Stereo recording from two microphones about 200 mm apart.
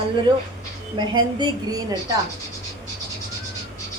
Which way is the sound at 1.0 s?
20° right (ahead or behind).